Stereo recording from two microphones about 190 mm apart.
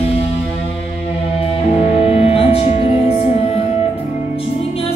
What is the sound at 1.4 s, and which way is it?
Music, 30° left (ahead or behind).